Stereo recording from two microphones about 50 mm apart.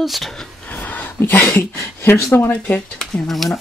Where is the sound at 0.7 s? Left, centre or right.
Left.